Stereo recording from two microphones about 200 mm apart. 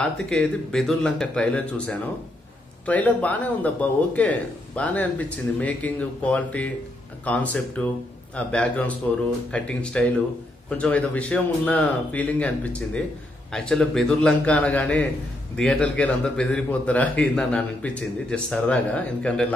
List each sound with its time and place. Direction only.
0.0 s speech: 5° left (ahead or behind)